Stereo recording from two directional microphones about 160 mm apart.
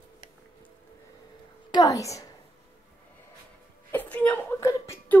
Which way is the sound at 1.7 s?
25° left (ahead or behind).